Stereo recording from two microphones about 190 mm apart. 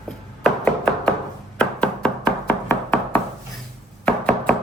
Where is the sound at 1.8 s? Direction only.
5° left (ahead or behind).